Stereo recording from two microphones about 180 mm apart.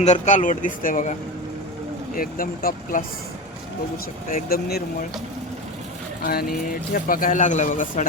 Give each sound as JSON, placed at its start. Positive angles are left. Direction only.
{"t": 0.0, "sound": "speech", "side_deg": 40}
{"t": 2.1, "sound": "speech", "side_deg": 50}
{"t": 4.3, "sound": "speech", "side_deg": 55}
{"t": 6.9, "sound": "speech", "side_deg": 50}